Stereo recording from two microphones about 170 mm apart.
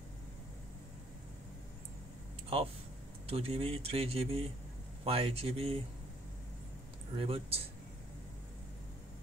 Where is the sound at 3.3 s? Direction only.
35° right (ahead or behind).